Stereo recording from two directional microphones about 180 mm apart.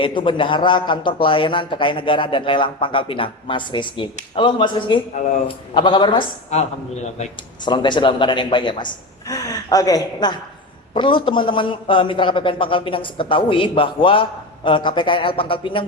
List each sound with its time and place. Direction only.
0.0 s a man's voice: 25° left (ahead or behind)
7.6 s a man's voice: 25° left (ahead or behind)